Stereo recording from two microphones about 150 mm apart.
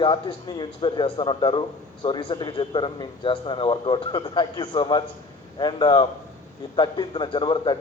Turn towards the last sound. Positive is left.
turn(degrees=30)  # may be behind; listen again after turning